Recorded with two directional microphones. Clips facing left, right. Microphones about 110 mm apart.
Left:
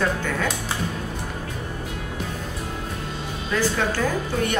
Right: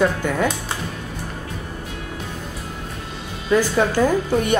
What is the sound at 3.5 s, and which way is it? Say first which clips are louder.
Speech: right 6 dB; 15° right (ahead or behind).